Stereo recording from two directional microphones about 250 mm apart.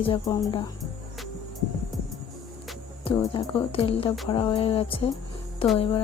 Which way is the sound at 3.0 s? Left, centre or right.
Left.